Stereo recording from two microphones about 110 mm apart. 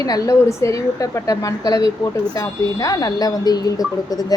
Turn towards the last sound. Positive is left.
turn(degrees=35)  # may be behind; listen again after turning